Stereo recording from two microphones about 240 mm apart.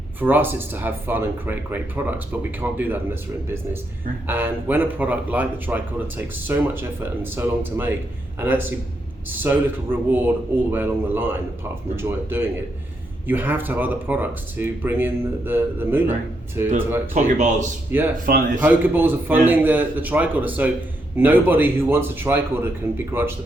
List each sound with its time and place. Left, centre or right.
0.2 s speech: centre
4.3 s speech: centre
17.2 s speech: right
18.6 s speech: centre